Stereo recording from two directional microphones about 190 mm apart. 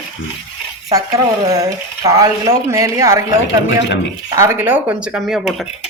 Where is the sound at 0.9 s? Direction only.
20° right (ahead or behind).